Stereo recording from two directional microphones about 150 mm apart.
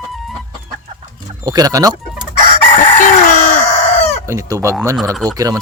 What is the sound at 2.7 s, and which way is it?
Chicken, 60° left (ahead or behind).